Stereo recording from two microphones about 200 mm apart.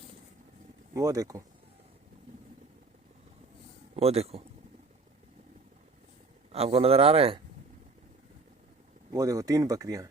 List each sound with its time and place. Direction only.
0.9 s speech: 15° right (ahead or behind)
3.9 s speech: 30° right (ahead or behind)
6.5 s speech: 30° right (ahead or behind)
9.1 s speech: 15° right (ahead or behind)